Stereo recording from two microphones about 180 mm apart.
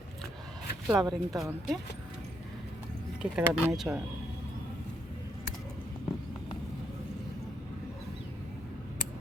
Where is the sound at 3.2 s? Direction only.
5° right (ahead or behind).